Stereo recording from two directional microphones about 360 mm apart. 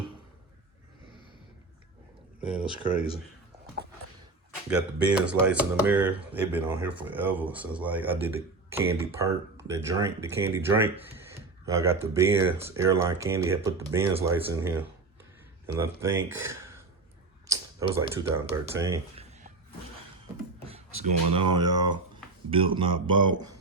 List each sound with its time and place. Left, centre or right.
2.4 s speech: centre
4.7 s speech: centre
21.0 s speech: right
21.6 s speech: centre